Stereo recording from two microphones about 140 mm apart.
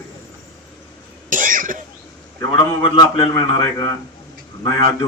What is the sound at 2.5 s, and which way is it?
A man's voice, 30° left (ahead or behind).